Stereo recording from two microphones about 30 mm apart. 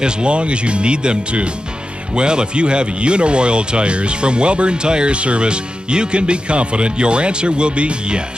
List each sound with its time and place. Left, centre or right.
0.0 s speech: right